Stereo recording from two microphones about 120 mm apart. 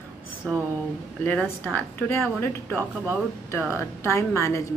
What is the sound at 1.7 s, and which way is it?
Speech, 20° left (ahead or behind).